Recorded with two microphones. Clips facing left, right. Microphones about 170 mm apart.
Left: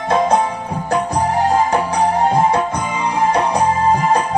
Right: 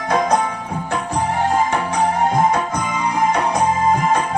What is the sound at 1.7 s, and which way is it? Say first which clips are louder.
Music: left 3 dB; 35° left (ahead or behind).